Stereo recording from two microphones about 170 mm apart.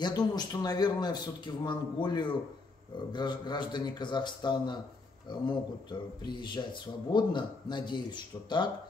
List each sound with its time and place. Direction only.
0.0 s speech: 25° left (ahead or behind)